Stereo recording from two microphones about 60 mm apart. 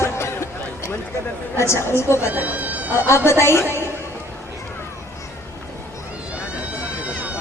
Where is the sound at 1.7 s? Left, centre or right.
Left.